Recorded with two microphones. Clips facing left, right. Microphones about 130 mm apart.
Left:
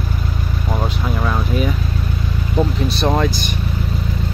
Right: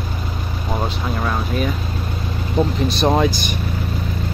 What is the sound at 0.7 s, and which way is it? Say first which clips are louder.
Speech: even; centre (ahead or behind).